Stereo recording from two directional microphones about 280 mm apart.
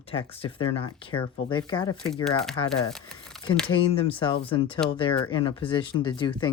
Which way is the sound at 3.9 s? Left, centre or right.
Centre.